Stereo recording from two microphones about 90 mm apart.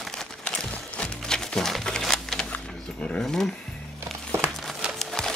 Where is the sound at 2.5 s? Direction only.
10° left (ahead or behind).